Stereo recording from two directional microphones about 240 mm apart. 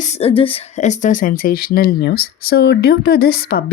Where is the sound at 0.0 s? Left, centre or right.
Left.